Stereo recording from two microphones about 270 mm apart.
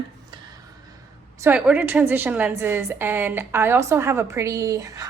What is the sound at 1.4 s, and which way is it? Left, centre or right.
A woman's voice, centre.